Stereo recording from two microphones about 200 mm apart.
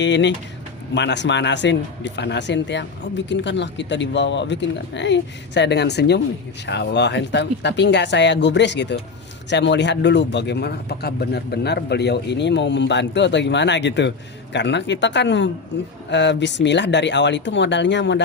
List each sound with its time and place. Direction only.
0.0 s a man's voice: 60° left (ahead or behind)